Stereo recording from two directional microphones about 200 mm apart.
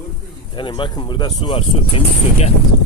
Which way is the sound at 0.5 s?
25° left (ahead or behind).